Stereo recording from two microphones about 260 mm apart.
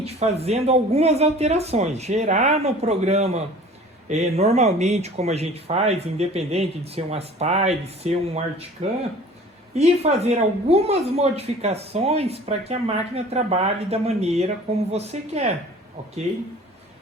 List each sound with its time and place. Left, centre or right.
0.0 s speech: right
9.7 s speech: right